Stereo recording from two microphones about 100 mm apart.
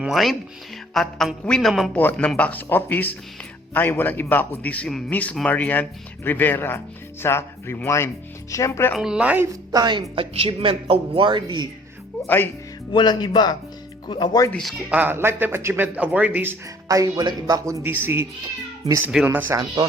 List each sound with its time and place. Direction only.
0.0 s a woman's voice: centre (ahead or behind)
1.9 s a man's voice: 20° left (ahead or behind)
9.0 s speech: 5° right (ahead or behind)
9.7 s speech: 45° right (ahead or behind)
10.2 s speech: 65° right (ahead or behind)
12.2 s speech: 20° left (ahead or behind)
12.9 s speech: 50° left (ahead or behind)
14.5 s a woman's voice: centre (ahead or behind)
14.8 s a man's voice: 15° right (ahead or behind)
16.9 s speech: 35° right (ahead or behind)
17.8 s a man's voice: 20° right (ahead or behind)